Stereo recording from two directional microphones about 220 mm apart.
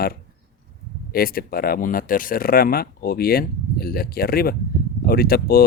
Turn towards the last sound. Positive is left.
turn(degrees=45)  # may be behind; listen again after turning